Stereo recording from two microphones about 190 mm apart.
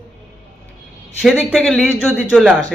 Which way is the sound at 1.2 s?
Centre (ahead or behind).